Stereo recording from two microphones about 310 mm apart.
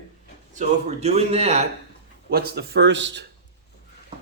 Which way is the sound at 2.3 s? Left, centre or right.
Right.